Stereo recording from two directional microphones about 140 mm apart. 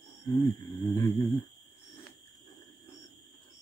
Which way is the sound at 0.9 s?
25° left (ahead or behind).